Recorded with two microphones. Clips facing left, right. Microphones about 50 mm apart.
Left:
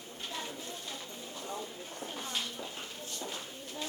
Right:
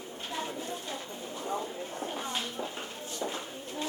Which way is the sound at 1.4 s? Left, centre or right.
Right.